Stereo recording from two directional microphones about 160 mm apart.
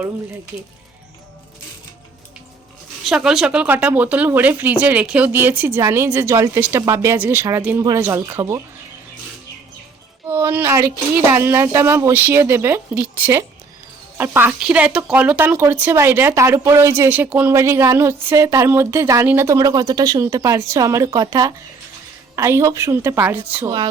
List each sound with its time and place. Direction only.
3.0 s speech: centre (ahead or behind)
10.2 s speech: 15° right (ahead or behind)